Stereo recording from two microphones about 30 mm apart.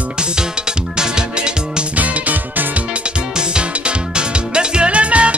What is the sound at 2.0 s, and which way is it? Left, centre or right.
Music, right.